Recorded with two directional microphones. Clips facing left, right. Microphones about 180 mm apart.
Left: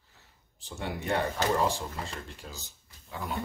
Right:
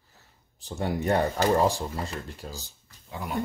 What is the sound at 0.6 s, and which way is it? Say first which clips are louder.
Speech: right 6 dB; 40° right (ahead or behind).